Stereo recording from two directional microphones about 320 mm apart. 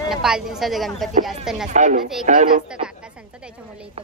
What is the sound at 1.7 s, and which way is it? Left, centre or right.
Speech, right.